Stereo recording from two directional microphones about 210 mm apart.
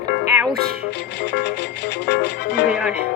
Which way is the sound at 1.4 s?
55° left (ahead or behind).